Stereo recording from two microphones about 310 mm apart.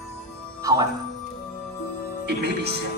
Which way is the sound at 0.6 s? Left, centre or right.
Centre.